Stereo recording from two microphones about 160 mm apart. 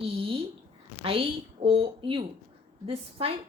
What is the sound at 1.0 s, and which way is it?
Speech, 35° right (ahead or behind).